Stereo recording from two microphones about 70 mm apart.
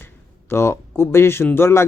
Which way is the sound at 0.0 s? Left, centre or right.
Left.